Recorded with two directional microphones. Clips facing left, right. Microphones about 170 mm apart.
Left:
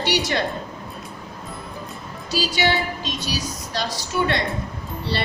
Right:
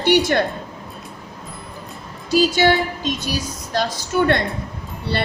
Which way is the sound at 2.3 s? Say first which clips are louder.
Right 6 dB; 50° right (ahead or behind).